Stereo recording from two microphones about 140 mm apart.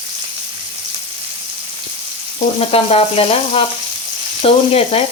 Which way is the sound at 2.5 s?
45° left (ahead or behind).